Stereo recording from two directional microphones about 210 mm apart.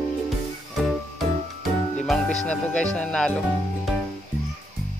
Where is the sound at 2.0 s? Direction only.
Centre (ahead or behind).